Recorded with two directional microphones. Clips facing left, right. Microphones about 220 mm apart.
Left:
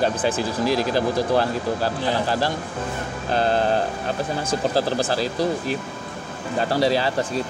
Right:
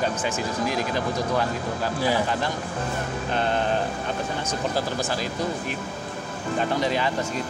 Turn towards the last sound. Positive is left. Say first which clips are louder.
# left 4 dB
turn(degrees=35)  # may be behind; listen again after turning